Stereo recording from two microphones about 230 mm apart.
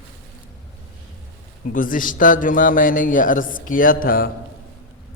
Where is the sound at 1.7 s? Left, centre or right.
Left.